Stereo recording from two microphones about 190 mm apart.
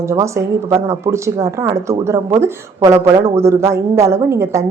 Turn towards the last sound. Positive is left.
turn(degrees=-15)  # may be behind; listen again after turning